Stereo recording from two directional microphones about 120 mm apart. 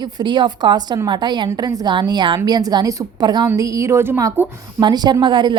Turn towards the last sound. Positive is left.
turn(degrees=-40)  # may be behind; listen again after turning